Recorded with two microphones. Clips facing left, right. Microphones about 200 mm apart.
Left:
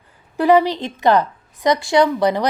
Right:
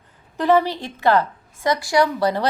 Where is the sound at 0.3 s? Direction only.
15° left (ahead or behind).